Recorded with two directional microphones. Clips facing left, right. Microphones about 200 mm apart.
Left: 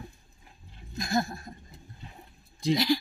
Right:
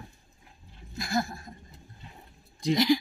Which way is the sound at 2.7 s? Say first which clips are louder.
Right 2 dB; 15° right (ahead or behind).